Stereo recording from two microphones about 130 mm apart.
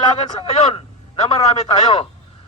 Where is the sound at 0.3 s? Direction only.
50° left (ahead or behind).